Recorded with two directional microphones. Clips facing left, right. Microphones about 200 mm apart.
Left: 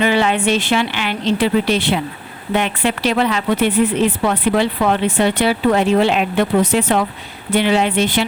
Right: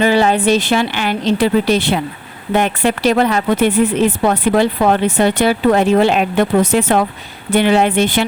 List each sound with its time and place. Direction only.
0.0 s a woman's voice: 40° right (ahead or behind)